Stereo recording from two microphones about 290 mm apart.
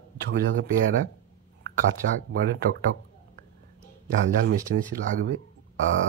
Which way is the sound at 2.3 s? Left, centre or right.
Right.